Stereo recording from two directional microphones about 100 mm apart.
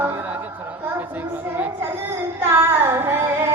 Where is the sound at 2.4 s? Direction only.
25° right (ahead or behind).